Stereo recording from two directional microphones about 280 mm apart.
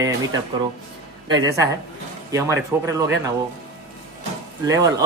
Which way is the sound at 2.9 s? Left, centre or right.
Centre.